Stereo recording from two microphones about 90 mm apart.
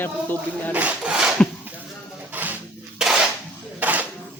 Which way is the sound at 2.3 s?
20° right (ahead or behind).